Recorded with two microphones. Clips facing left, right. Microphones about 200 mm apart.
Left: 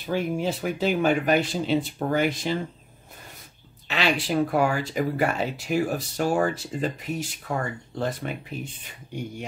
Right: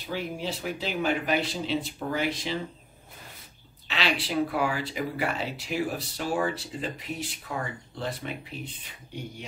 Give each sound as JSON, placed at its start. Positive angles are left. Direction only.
{"t": 0.0, "sound": "speech", "side_deg": 50}
{"t": 3.8, "sound": "speech", "side_deg": 45}